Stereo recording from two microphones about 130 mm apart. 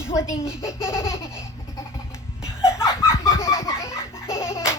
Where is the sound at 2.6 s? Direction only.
20° left (ahead or behind).